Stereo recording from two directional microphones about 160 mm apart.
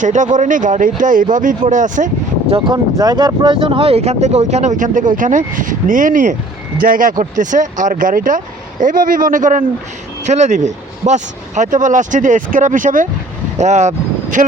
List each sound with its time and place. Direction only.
0.0 s speech: 50° right (ahead or behind)
2.5 s speech: 25° right (ahead or behind); by 14.4 s 50° right (ahead or behind)